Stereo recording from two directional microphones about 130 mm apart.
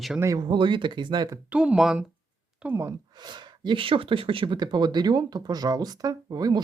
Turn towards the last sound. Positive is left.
turn(degrees=-30)  # may be behind; listen again after turning